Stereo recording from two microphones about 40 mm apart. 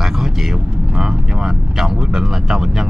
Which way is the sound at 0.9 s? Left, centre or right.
Centre.